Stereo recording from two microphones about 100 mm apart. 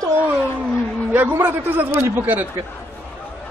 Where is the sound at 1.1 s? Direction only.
20° right (ahead or behind).